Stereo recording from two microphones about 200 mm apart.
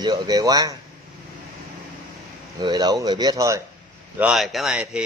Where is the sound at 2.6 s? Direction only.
20° right (ahead or behind).